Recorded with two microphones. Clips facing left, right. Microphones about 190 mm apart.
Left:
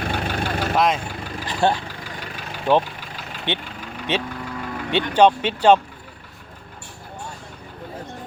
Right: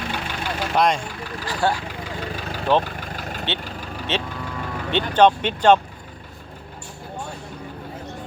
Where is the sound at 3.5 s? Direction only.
15° left (ahead or behind).